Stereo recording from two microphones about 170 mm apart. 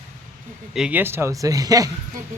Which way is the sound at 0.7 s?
5° right (ahead or behind).